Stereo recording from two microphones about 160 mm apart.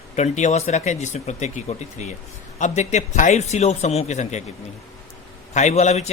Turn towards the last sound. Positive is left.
turn(degrees=45)  # may be behind; listen again after turning